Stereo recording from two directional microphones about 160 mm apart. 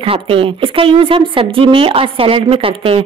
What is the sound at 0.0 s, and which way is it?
A woman's voice, 35° right (ahead or behind).